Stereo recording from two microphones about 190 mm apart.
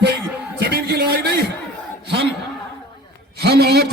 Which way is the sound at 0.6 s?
55° right (ahead or behind).